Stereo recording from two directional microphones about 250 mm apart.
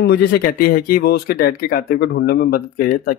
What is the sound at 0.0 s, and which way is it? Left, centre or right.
Speech, left.